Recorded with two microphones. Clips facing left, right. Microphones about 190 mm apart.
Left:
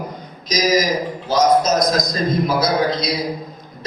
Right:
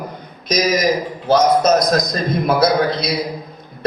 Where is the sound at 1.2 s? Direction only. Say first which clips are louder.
Right 2 dB; 60° right (ahead or behind).